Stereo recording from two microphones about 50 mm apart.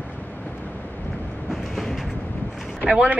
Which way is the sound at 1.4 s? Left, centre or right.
Centre.